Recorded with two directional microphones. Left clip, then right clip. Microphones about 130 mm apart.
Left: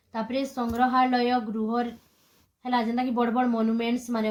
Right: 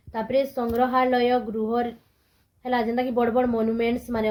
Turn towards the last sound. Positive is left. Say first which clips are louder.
# right 3 dB
turn(degrees=-40)  # may be behind; listen again after turning